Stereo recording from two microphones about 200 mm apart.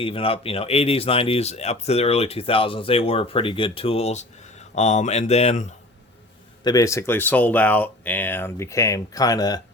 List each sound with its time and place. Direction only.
0.0 s speech: 25° left (ahead or behind)
6.7 s speech: 15° left (ahead or behind)